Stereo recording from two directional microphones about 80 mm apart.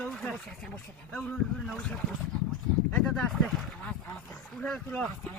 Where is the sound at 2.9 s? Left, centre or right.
Centre.